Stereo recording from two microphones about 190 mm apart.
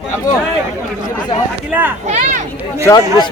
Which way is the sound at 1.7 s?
10° right (ahead or behind).